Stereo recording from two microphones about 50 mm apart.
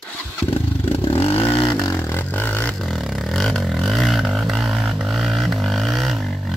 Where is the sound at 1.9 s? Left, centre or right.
Left.